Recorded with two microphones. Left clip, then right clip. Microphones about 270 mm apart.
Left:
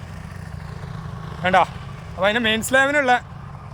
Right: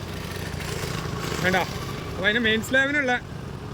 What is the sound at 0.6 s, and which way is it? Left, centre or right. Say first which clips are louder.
Vehicle: right 8 dB; right.